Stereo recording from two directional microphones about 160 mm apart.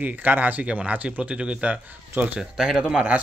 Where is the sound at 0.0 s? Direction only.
10° right (ahead or behind).